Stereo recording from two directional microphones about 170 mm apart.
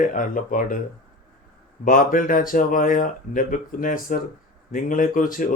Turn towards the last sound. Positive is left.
turn(degrees=55)  # may be behind; listen again after turning